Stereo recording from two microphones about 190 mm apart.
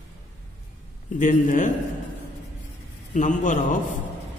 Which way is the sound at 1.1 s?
40° left (ahead or behind).